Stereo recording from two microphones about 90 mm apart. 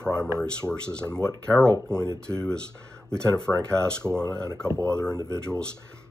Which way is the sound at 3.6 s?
10° left (ahead or behind).